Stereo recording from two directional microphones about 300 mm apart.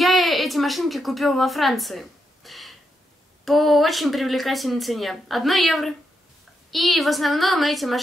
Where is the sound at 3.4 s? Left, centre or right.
Centre.